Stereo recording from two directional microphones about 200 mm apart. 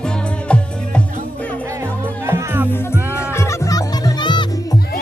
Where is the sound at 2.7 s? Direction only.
10° left (ahead or behind).